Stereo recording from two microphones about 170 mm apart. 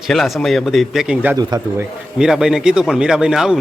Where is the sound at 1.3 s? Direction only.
20° right (ahead or behind).